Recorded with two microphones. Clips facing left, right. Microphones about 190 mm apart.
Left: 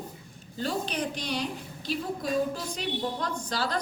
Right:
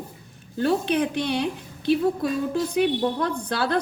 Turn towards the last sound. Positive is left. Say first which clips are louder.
# right 6 dB
turn(degrees=-60)  # may be behind; listen again after turning